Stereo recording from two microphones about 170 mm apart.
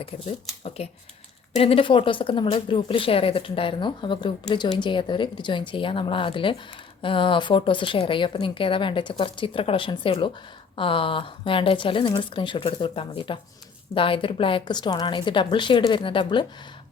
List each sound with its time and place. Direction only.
0.8 s a woman's voice: 35° left (ahead or behind)